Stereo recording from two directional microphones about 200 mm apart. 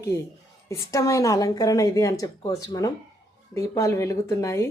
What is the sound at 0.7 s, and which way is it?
A woman's voice, 15° left (ahead or behind).